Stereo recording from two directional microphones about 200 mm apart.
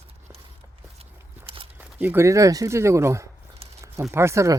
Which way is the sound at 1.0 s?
30° right (ahead or behind).